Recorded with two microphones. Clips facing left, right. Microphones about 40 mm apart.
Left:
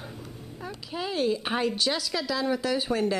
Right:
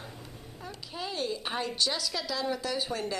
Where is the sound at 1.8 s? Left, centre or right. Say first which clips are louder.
Left 3 dB; centre.